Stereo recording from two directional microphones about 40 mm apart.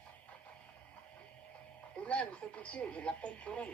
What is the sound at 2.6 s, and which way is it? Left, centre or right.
Speech, left.